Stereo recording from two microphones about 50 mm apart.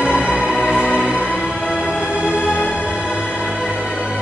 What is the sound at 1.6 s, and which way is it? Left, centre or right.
Music, left.